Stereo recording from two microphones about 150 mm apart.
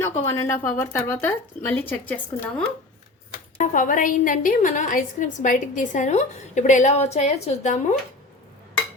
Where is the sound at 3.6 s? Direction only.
60° left (ahead or behind).